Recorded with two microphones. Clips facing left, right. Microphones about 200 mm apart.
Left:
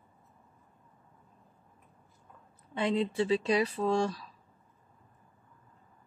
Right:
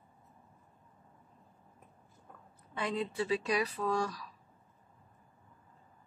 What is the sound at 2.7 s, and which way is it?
Speech, 25° left (ahead or behind).